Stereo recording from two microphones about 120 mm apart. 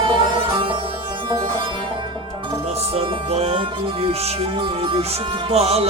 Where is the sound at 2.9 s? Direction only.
55° right (ahead or behind).